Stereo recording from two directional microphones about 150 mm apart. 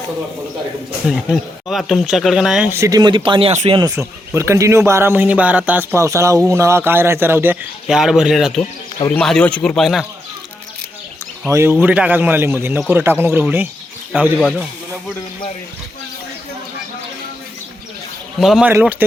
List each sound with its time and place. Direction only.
1.0 s speech: centre (ahead or behind)
2.6 s speech: 20° right (ahead or behind)
3.5 s speech: 50° right (ahead or behind)
3.8 s speech: 25° right (ahead or behind); by 10.0 s centre (ahead or behind)
11.4 s speech: 15° right (ahead or behind)
14.3 s speech: 5° left (ahead or behind)
18.3 s speech: centre (ahead or behind)
18.7 s speech: 10° right (ahead or behind)